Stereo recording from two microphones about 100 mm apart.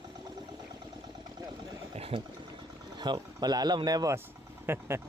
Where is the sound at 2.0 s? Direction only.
70° right (ahead or behind).